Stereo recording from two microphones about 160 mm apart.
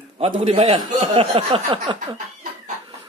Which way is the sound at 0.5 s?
35° right (ahead or behind).